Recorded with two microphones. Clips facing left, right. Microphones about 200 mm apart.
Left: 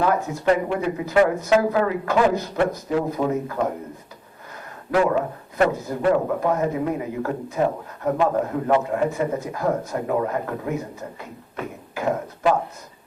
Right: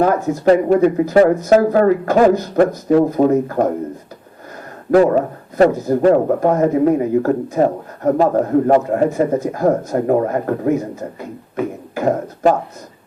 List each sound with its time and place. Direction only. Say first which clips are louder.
0.0 s speech: right 7 dB; 45° right (ahead or behind)
4.9 s speech: right 8 dB; 40° right (ahead or behind)
11.9 s speech: right 6 dB; 45° right (ahead or behind)